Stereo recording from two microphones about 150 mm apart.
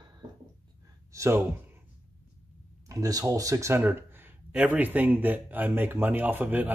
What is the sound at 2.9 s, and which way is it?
Speech, 25° right (ahead or behind).